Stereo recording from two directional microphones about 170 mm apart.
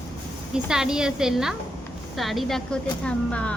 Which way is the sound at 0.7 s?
5° right (ahead or behind).